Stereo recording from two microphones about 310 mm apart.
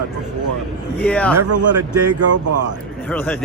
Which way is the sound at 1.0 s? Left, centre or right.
Centre.